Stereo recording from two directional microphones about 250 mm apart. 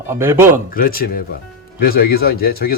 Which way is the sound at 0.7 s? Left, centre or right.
Left.